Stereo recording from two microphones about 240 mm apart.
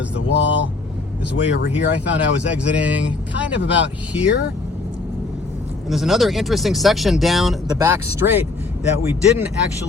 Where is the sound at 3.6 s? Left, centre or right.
Left.